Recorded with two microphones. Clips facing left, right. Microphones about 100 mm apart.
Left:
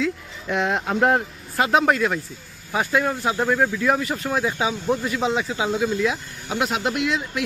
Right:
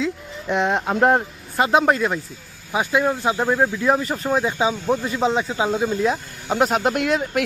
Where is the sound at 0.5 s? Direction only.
Centre (ahead or behind).